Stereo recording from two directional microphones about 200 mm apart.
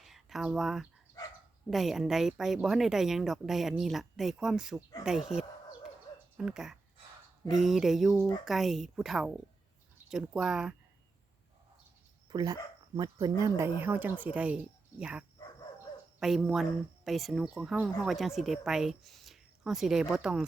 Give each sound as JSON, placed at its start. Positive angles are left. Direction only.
{"t": 0.0, "sound": "a sound", "side_deg": 0}
{"t": 1.7, "sound": "speech", "side_deg": 0}
{"t": 5.0, "sound": "bird", "side_deg": -5}
{"t": 6.3, "sound": "speech", "side_deg": -5}
{"t": 12.3, "sound": "speech", "side_deg": -20}
{"t": 16.2, "sound": "speech", "side_deg": 0}